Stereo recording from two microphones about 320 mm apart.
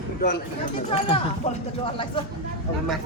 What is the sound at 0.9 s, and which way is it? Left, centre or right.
Speech, centre.